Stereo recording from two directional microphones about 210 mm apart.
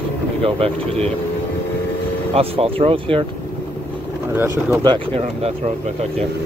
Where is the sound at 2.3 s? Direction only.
25° right (ahead or behind).